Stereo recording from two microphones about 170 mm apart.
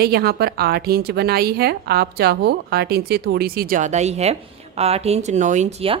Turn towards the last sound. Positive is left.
turn(degrees=-40)  # may be behind; listen again after turning